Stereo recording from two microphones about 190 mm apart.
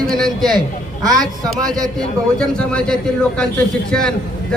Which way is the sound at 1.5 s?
20° right (ahead or behind).